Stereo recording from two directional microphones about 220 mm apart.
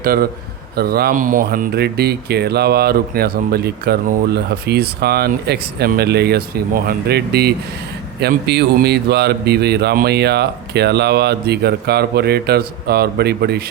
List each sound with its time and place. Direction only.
0.0 s speech: 40° right (ahead or behind)